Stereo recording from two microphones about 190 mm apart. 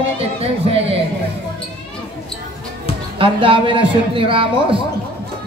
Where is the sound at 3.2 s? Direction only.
25° right (ahead or behind).